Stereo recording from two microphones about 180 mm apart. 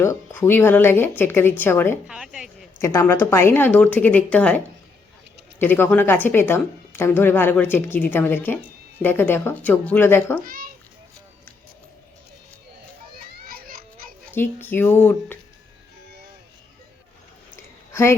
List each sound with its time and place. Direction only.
0.0 s speech: 15° left (ahead or behind)
2.0 s a woman's voice: 5° right (ahead or behind)
2.8 s speech: 15° left (ahead or behind)
10.5 s a sound: 50° right (ahead or behind)
13.3 s children playing: 55° right (ahead or behind)
14.3 s speech: 10° left (ahead or behind)
17.9 s a woman's voice: 15° left (ahead or behind)